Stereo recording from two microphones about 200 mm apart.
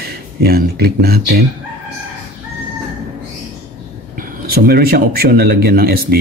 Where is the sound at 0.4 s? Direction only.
50° right (ahead or behind).